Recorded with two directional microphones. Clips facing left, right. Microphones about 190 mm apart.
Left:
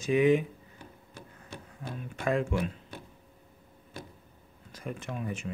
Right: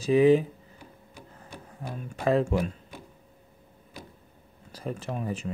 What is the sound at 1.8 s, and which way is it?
Speech, 40° right (ahead or behind).